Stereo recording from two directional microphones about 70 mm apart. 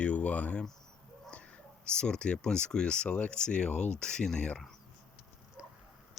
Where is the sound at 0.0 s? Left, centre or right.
Left.